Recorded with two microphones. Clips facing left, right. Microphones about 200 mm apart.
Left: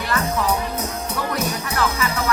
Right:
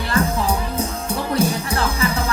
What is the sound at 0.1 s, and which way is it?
Music, 30° right (ahead or behind).